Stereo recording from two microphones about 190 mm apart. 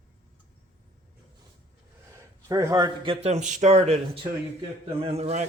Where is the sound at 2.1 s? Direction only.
15° right (ahead or behind).